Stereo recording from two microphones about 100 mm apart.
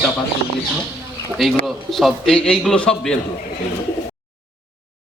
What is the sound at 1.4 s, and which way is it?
Speech, centre (ahead or behind).